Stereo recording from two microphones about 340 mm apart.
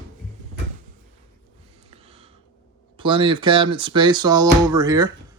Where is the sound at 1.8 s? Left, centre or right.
Centre.